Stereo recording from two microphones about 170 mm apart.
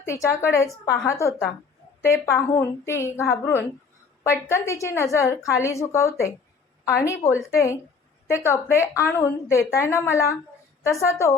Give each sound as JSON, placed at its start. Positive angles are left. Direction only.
{"t": 0.0, "sound": "a woman's voice", "side_deg": 15}